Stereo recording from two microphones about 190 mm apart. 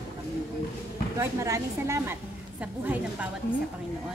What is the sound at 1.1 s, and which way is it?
Speech, 15° right (ahead or behind).